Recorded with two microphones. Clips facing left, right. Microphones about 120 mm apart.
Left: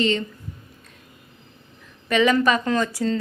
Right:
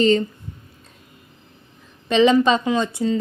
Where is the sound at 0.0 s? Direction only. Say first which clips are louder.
Right 6 dB; 35° right (ahead or behind).